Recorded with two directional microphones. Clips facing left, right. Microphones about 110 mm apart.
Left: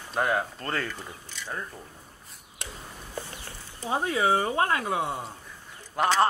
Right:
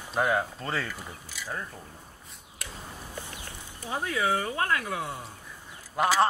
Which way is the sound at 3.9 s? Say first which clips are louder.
Left 4 dB; 25° left (ahead or behind).